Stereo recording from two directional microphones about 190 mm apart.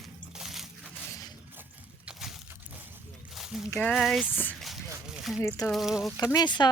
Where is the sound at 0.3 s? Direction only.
Centre (ahead or behind).